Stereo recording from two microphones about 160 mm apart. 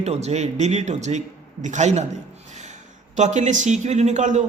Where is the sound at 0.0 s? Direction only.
40° right (ahead or behind).